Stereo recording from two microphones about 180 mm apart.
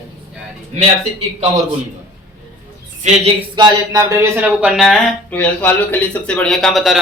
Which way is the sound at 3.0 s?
40° right (ahead or behind).